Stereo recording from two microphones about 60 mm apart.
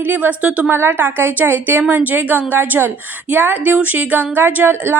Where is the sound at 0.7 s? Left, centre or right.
Right.